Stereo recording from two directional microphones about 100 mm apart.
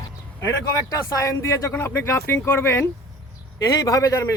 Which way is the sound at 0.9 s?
35° left (ahead or behind).